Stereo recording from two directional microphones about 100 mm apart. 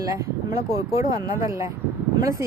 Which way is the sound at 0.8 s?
35° right (ahead or behind).